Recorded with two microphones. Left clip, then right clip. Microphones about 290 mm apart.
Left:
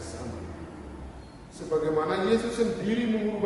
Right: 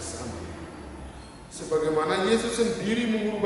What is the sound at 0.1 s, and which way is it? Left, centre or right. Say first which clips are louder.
Vehicle: right 2 dB; centre.